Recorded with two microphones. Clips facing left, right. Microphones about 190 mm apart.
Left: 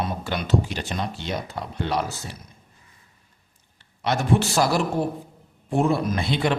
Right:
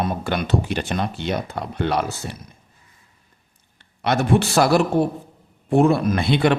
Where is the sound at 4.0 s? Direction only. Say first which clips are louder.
Right 3 dB; 60° right (ahead or behind).